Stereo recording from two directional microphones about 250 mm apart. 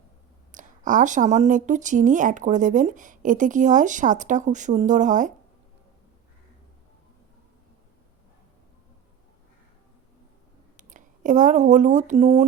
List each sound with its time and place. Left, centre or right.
0.5 s speech: right
10.8 s speech: right